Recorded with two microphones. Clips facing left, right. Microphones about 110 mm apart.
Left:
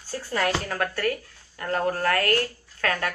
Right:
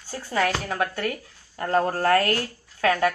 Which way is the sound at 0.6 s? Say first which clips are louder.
Even; 20° right (ahead or behind).